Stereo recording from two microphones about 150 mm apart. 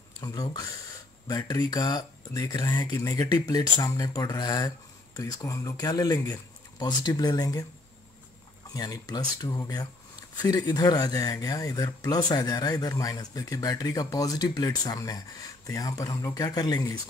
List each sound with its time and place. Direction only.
0.2 s speech: 25° left (ahead or behind)
8.7 s speech: 25° left (ahead or behind)